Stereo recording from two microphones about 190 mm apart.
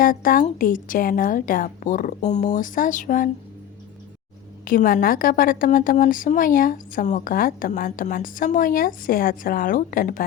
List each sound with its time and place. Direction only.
0.0 s a woman's voice: 45° left (ahead or behind)
4.6 s a woman's voice: 50° left (ahead or behind)